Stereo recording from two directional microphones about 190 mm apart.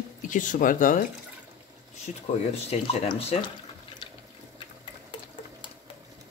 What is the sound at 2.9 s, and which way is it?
Speech, 30° left (ahead or behind).